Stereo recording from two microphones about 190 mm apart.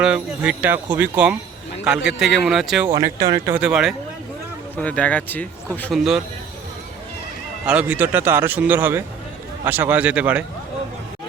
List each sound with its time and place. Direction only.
0.0 s a man's voice: 5° right (ahead or behind)
2.9 s a man's voice: 20° right (ahead or behind); by 6.0 s 10° left (ahead or behind)
7.7 s a man's voice: 5° right (ahead or behind)